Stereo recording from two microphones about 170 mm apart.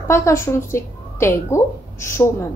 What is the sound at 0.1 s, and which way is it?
Speech, 15° left (ahead or behind).